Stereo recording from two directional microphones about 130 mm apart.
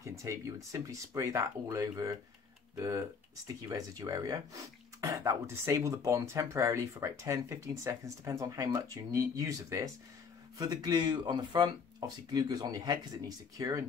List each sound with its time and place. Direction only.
0.0 s speech: 25° right (ahead or behind)